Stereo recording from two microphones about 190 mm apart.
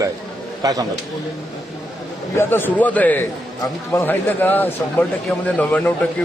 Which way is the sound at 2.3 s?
10° left (ahead or behind).